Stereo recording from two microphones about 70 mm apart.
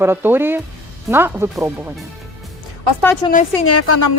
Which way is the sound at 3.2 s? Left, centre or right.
Left.